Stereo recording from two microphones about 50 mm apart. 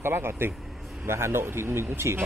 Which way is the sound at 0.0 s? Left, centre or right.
Right.